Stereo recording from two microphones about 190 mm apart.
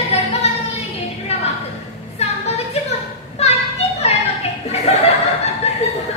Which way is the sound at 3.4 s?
35° left (ahead or behind).